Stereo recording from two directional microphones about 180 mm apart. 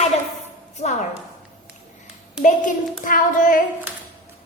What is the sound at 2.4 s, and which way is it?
A woman's voice, 45° left (ahead or behind).